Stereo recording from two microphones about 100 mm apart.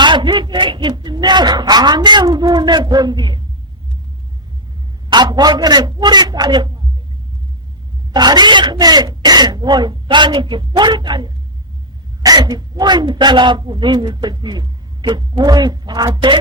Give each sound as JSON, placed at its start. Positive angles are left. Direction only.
{"t": 0.0, "sound": "a sound", "side_deg": -50}
{"t": 5.0, "sound": "speech", "side_deg": -45}
{"t": 8.1, "sound": "speech", "side_deg": -45}